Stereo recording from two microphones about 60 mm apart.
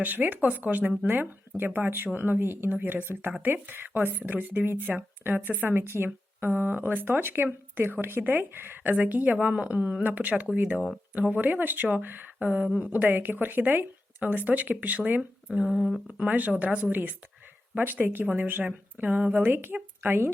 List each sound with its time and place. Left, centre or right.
0.0 s speech: right
5.7 s speech: right
15.6 s speech: centre
16.1 s speech: right